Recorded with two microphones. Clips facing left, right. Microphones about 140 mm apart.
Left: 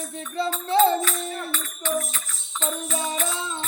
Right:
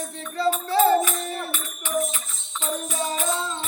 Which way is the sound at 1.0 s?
15° right (ahead or behind).